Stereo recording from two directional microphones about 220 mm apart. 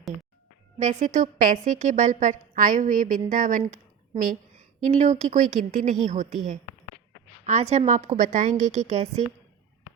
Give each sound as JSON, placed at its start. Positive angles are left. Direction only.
{"t": 0.8, "sound": "a woman's voice", "side_deg": -30}
{"t": 4.8, "sound": "a woman's voice", "side_deg": -35}